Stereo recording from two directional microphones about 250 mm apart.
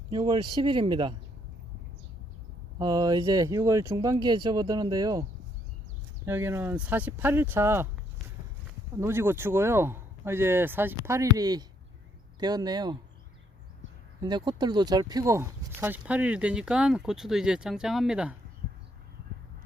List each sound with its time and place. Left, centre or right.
0.1 s speech: centre
2.7 s speech: centre
6.2 s speech: centre
9.0 s speech: centre
14.2 s speech: centre